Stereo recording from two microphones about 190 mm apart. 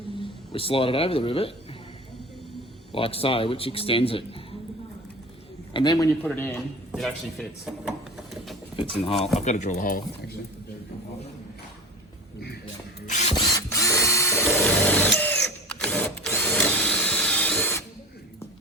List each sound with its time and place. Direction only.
0.2 s speech: 30° left (ahead or behind)
2.9 s speech: 30° left (ahead or behind)
5.7 s speech: 20° left (ahead or behind)
7.0 s speech: centre (ahead or behind)
8.7 s a sound: 30° left (ahead or behind)
9.2 s speech: 35° left (ahead or behind)
13.1 s mechanisms: 40° left (ahead or behind)
13.3 s tools: 20° left (ahead or behind)
14.3 s drill: centre (ahead or behind)